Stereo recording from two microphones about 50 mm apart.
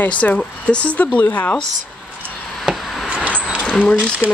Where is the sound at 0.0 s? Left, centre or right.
Left.